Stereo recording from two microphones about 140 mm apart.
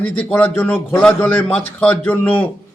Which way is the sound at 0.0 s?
10° left (ahead or behind).